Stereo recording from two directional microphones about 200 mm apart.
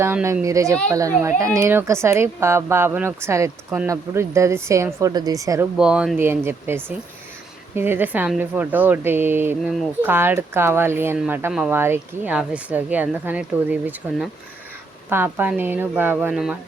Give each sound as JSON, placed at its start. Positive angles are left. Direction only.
{"t": 0.0, "sound": "speech", "side_deg": -10}
{"t": 5.7, "sound": "speech", "side_deg": -5}